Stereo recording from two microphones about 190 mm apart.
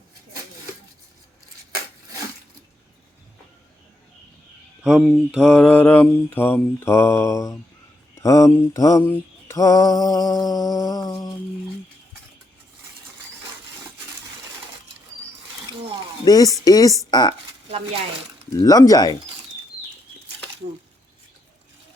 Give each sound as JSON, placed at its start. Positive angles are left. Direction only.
{"t": 4.9, "sound": "mantra", "side_deg": 0}
{"t": 16.2, "sound": "speech", "side_deg": 20}
{"t": 18.6, "sound": "speech", "side_deg": 20}